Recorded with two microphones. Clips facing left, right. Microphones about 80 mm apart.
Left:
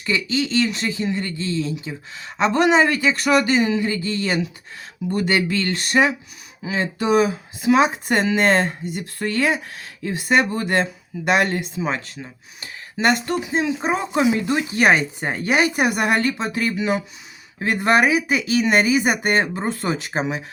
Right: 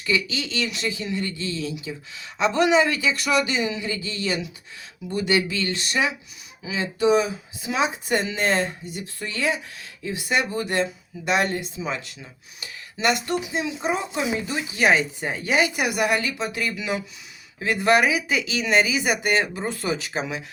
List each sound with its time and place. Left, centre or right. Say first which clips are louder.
0.0 s speech: left 3 dB; left
18.6 s speech: left 3 dB; left